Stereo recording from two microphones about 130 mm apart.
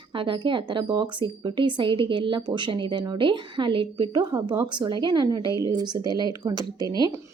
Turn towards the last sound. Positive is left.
turn(degrees=-30)  # may be behind; listen again after turning